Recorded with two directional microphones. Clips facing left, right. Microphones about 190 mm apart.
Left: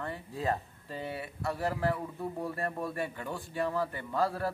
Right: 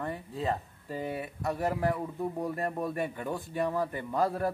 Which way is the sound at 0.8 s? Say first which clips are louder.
Right 4 dB; 15° right (ahead or behind).